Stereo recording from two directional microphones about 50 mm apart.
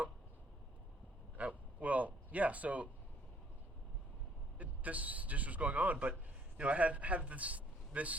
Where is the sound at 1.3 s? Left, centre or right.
Right.